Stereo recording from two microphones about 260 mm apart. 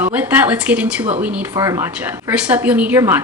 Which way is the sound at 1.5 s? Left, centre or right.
Centre.